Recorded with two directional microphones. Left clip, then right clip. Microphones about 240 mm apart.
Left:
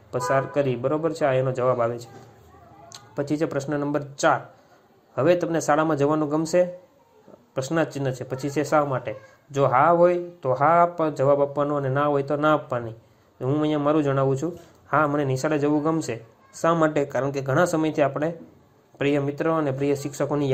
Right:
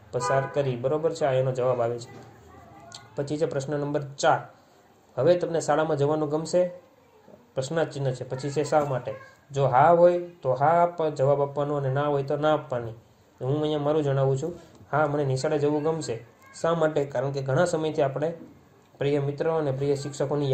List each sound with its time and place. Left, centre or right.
0.1 s speech: left